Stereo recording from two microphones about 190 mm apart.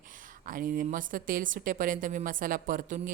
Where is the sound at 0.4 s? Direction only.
45° right (ahead or behind).